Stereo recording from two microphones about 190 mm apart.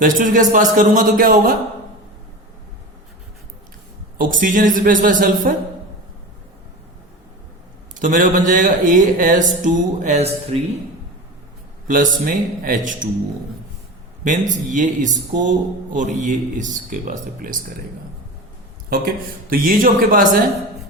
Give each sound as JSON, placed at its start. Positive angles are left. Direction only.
{"t": 0.0, "sound": "speech", "side_deg": -45}
{"t": 4.2, "sound": "speech", "side_deg": -45}
{"t": 7.9, "sound": "speech", "side_deg": -45}
{"t": 11.9, "sound": "speech", "side_deg": -45}
{"t": 14.3, "sound": "speech", "side_deg": -40}
{"t": 18.9, "sound": "speech", "side_deg": -50}